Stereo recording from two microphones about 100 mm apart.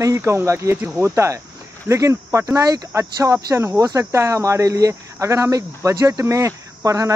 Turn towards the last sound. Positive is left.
turn(degrees=-35)  # may be behind; listen again after turning